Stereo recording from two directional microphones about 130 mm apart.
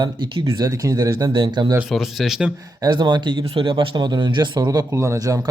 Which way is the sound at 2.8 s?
35° right (ahead or behind).